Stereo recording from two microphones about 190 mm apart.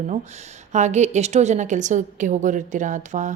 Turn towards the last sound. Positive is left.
turn(degrees=-40)  # may be behind; listen again after turning